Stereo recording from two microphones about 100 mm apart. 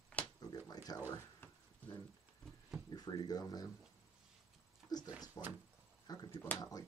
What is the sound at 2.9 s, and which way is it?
Speech, 40° left (ahead or behind).